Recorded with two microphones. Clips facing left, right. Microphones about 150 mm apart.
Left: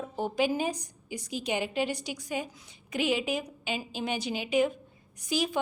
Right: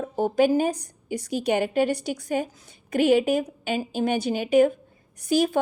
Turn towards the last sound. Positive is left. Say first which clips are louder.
# right 8 dB
turn(degrees=-55)  # may be behind; listen again after turning